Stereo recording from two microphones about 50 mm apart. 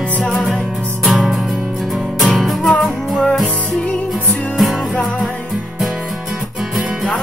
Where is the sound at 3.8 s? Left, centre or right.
Left.